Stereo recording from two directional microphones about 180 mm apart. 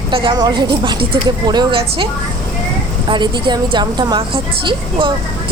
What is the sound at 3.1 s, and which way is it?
Speech, 25° right (ahead or behind).